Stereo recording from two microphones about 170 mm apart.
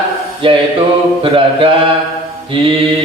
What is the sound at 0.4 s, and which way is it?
Mantra, 30° right (ahead or behind).